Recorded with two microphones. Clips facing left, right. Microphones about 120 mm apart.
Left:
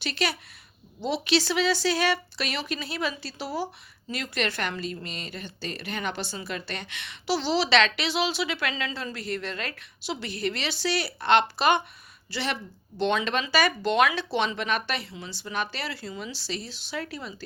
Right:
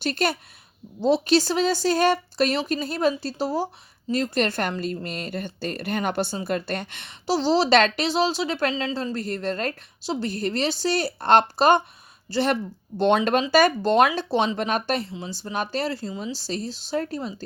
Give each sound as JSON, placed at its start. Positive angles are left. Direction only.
{"t": 0.0, "sound": "a woman's voice", "side_deg": -45}
{"t": 16.0, "sound": "a woman's voice", "side_deg": -30}